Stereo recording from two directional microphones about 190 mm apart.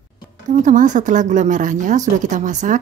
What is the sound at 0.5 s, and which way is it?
Speech, 40° right (ahead or behind).